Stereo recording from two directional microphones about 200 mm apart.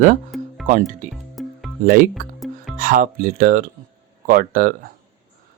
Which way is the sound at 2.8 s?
40° right (ahead or behind).